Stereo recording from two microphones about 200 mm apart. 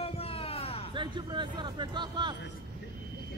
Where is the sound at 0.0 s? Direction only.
30° left (ahead or behind).